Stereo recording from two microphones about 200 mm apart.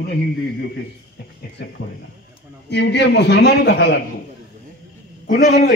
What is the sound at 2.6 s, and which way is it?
A man's voice, 60° left (ahead or behind).